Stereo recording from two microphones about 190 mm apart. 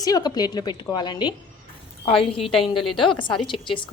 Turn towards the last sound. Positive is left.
turn(degrees=25)  # may be behind; listen again after turning